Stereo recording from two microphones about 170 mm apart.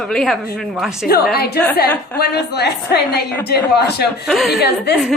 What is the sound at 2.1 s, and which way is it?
A woman's voice, 70° left (ahead or behind).